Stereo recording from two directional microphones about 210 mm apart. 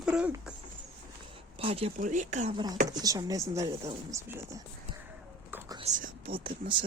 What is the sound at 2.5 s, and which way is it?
Speech, 20° right (ahead or behind).